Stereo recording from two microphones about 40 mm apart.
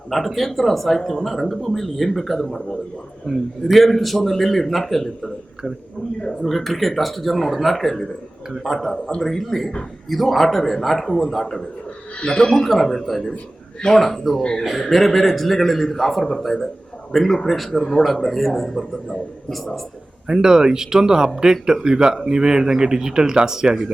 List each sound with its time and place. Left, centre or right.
0.3 s a man's voice: centre
6.4 s a man's voice: centre
12.2 s speech: centre
12.5 s a man's voice: centre
20.2 s speech: centre